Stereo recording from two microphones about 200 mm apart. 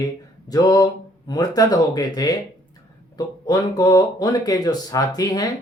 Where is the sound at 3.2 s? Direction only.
20° left (ahead or behind).